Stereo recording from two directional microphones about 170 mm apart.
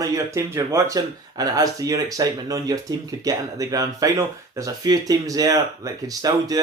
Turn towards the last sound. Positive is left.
turn(degrees=-20)  # may be behind; listen again after turning